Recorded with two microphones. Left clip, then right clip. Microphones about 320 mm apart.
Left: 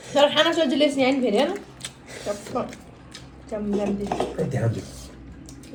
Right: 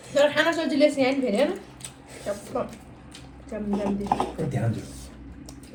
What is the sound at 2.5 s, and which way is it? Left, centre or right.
Speech, centre.